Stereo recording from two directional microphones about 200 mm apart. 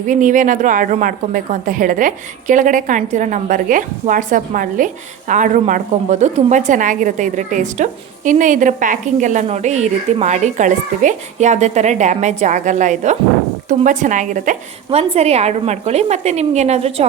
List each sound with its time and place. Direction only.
0.1 s a woman's voice: 40° right (ahead or behind)